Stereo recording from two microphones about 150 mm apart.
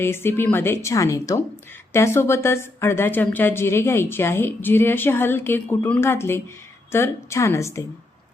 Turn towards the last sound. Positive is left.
turn(degrees=20)  # may be behind; listen again after turning